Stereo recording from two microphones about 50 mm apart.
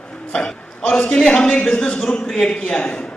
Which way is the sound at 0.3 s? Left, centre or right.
Centre.